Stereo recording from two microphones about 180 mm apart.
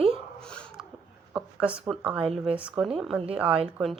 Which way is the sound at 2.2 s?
30° right (ahead or behind).